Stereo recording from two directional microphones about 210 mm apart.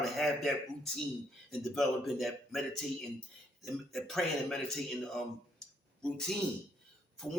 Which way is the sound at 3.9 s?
Centre (ahead or behind).